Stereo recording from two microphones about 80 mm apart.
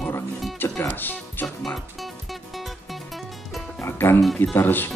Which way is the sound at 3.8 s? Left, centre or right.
Left.